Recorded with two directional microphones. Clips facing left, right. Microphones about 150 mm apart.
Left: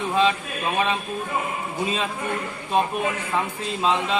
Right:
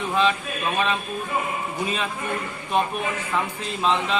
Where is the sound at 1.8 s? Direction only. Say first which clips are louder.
Left 3 dB; 25° left (ahead or behind).